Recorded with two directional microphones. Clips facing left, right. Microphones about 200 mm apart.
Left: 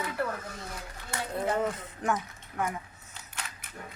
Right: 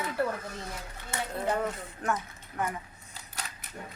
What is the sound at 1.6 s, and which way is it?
Speech, 15° left (ahead or behind).